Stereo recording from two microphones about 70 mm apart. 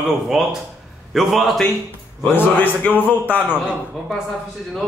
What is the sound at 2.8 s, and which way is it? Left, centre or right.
Speech, left.